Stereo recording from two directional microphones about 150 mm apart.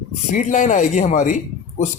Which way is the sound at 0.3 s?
55° left (ahead or behind).